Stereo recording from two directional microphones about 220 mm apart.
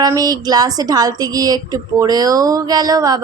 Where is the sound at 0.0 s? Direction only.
15° right (ahead or behind).